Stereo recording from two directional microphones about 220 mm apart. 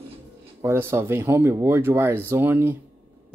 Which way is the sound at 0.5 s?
10° right (ahead or behind).